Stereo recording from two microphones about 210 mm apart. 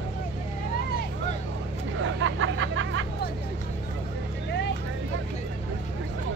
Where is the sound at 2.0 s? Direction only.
65° right (ahead or behind).